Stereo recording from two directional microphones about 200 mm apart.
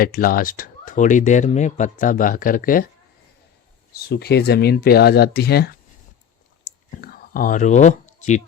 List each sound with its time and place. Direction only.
0.0 s speech: 45° left (ahead or behind)
4.1 s speech: 55° left (ahead or behind)
6.9 s whispering: 45° left (ahead or behind)